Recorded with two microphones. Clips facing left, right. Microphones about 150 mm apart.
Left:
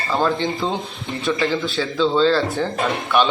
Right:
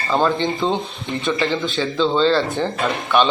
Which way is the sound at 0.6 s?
10° left (ahead or behind).